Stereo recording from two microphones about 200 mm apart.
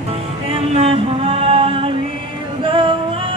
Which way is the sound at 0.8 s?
30° right (ahead or behind).